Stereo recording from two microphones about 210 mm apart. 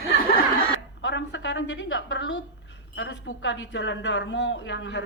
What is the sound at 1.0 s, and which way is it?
A woman's voice, 60° left (ahead or behind).